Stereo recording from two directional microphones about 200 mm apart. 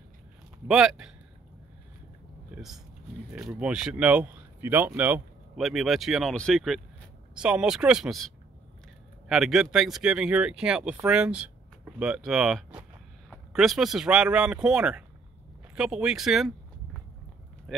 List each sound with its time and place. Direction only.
0.7 s speech: 5° right (ahead or behind)
2.5 s a sound: centre (ahead or behind)
3.3 s speech: 5° right (ahead or behind)
9.3 s speech: centre (ahead or behind)
17.7 s speech: centre (ahead or behind)